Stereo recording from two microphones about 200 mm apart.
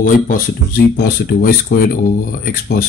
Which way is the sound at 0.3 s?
50° left (ahead or behind).